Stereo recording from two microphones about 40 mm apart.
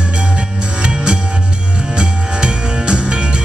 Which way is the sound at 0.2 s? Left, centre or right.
Right.